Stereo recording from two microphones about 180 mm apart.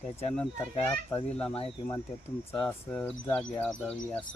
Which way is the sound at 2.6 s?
5° left (ahead or behind).